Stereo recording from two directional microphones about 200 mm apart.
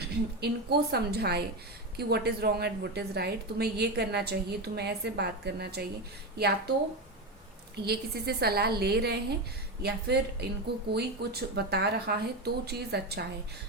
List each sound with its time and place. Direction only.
0.0 s a woman's voice: 55° right (ahead or behind)
7.9 s a woman's voice: 55° right (ahead or behind)